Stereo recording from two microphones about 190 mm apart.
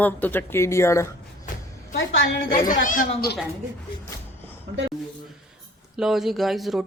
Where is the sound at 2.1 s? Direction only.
75° left (ahead or behind).